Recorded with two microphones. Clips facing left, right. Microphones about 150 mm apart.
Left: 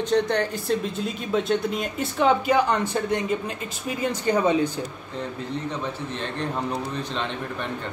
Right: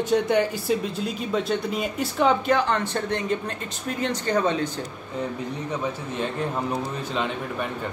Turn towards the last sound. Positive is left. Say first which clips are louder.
# right 2 dB
turn(degrees=-5)  # may be behind; listen again after turning